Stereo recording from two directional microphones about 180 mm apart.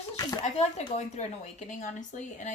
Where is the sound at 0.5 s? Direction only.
35° left (ahead or behind).